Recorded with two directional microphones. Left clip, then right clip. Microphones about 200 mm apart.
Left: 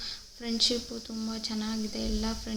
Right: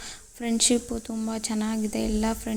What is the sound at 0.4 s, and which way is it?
Speech, 40° right (ahead or behind).